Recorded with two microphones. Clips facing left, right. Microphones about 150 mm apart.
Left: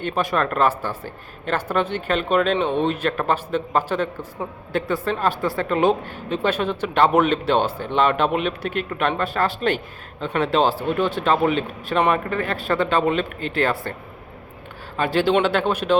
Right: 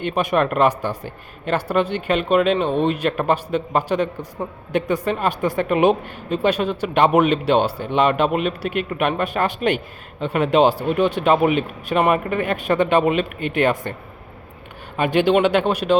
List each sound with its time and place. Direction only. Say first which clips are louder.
0.1 s speech: right 3 dB; 15° right (ahead or behind)
14.9 s speech: right 2 dB; 15° right (ahead or behind)